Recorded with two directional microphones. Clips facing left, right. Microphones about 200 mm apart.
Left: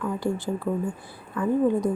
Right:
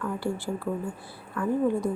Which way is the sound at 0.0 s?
20° left (ahead or behind).